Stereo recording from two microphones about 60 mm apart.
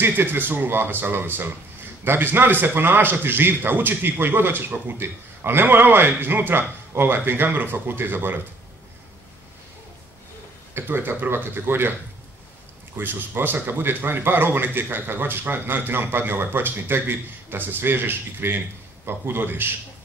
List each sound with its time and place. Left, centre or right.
0.0 s a man's voice: right
10.7 s a man's voice: right
12.9 s a man's voice: right